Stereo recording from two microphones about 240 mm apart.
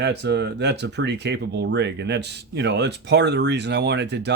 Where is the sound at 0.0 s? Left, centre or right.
Right.